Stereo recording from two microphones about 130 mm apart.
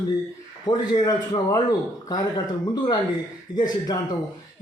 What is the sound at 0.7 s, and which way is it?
A man's voice, 30° left (ahead or behind).